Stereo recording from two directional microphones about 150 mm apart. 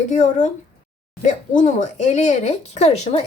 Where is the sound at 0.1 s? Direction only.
55° left (ahead or behind).